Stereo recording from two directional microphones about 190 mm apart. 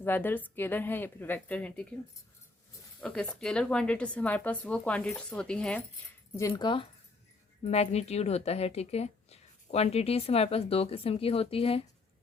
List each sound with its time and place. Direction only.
0.0 s a woman's voice: 10° left (ahead or behind)
3.0 s speech: 5° left (ahead or behind)
6.3 s speech: 15° left (ahead or behind); by 11.8 s 30° left (ahead or behind)